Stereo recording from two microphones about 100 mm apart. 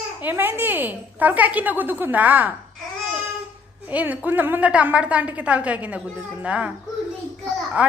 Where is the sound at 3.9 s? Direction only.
15° right (ahead or behind).